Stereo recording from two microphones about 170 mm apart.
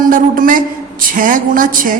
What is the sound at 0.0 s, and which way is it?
A man's voice, 55° right (ahead or behind).